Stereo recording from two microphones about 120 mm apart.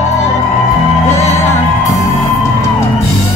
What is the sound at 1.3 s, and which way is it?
Music, 25° left (ahead or behind).